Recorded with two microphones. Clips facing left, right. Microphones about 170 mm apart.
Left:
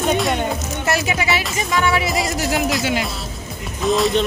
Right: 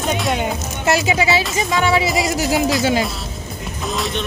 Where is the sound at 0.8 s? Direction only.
25° right (ahead or behind).